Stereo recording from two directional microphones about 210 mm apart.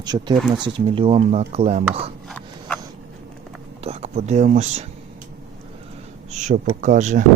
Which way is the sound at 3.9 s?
35° right (ahead or behind).